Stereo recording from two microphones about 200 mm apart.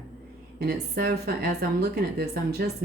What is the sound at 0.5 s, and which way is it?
Speech, 50° right (ahead or behind).